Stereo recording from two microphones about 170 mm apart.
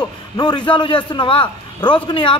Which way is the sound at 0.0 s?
25° left (ahead or behind).